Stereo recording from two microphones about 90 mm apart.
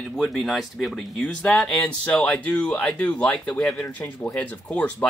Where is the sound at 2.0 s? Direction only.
15° left (ahead or behind).